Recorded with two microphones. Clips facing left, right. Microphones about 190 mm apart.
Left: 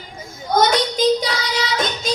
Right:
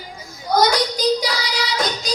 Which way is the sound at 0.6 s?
25° left (ahead or behind).